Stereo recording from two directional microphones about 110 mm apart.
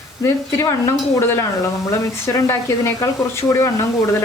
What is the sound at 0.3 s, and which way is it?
Speech, 25° left (ahead or behind).